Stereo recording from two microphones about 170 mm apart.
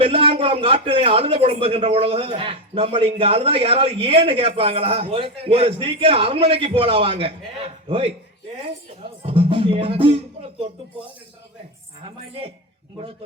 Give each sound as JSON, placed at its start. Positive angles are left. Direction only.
{"t": 0.0, "sound": "a man's voice", "side_deg": -35}